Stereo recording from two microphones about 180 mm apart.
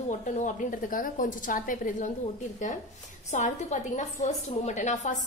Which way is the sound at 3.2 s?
40° left (ahead or behind).